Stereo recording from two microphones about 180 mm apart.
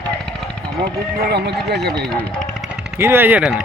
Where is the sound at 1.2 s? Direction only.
65° right (ahead or behind).